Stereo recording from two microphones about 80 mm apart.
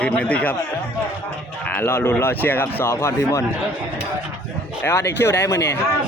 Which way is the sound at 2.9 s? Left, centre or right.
Left.